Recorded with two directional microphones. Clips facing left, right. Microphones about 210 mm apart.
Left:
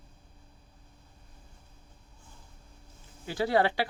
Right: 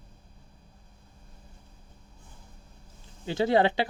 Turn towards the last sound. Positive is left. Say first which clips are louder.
# right 3 dB
turn(degrees=-20)  # may be behind; listen again after turning